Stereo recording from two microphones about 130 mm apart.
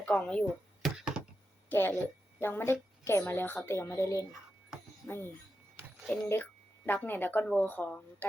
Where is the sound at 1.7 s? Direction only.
15° left (ahead or behind).